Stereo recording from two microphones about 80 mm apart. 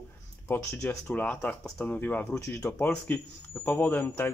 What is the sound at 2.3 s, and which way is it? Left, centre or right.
Speech, left.